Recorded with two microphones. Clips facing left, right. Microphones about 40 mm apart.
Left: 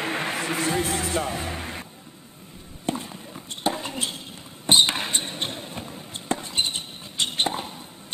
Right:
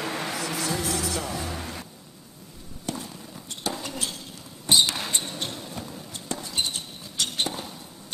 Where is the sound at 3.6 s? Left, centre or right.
Left.